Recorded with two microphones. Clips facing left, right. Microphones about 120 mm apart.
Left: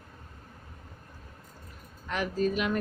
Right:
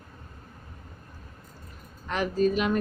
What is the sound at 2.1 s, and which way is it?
Speech, 30° right (ahead or behind).